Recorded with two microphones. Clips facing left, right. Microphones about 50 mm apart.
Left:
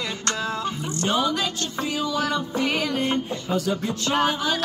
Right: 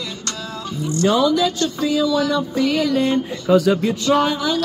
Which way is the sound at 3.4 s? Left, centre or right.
Right.